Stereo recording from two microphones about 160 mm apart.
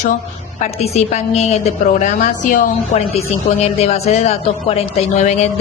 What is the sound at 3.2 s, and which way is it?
A woman's voice, 40° left (ahead or behind).